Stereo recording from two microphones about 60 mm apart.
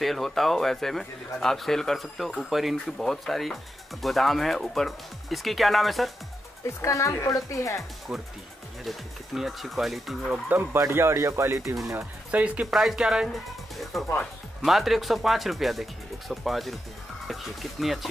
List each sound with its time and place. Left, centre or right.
0.0 s a man's voice: centre
6.8 s a woman's voice: left
8.1 s a man's voice: centre
10.5 s speech: right
12.3 s speech: right
12.7 s speech: centre
13.9 s a man's voice: centre